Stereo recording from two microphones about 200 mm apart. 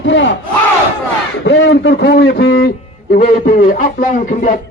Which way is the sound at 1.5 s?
65° left (ahead or behind).